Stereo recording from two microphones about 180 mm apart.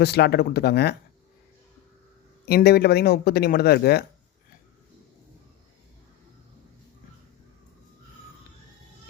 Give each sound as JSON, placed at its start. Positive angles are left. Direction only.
{"t": 0.0, "sound": "speech", "side_deg": 60}
{"t": 2.5, "sound": "speech", "side_deg": 60}